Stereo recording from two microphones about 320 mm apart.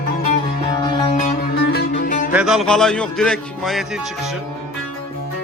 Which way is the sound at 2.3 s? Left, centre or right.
Centre.